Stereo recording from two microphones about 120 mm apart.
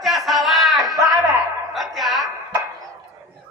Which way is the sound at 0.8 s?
30° right (ahead or behind).